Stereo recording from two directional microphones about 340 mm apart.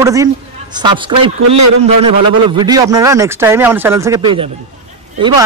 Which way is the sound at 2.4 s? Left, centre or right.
Centre.